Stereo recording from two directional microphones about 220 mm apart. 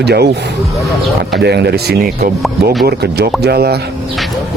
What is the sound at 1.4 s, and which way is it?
Speech, 50° right (ahead or behind).